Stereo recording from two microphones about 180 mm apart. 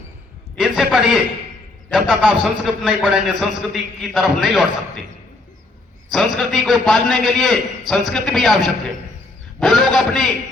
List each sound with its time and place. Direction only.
0.5 s a sound: centre (ahead or behind)
1.9 s a man's voice: 5° right (ahead or behind)
6.1 s a man's voice: centre (ahead or behind)